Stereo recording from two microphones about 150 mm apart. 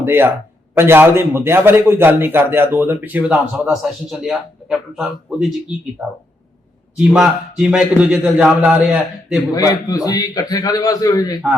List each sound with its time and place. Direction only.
0.0 s a man's voice: 15° right (ahead or behind)
9.6 s a man's voice: 25° left (ahead or behind)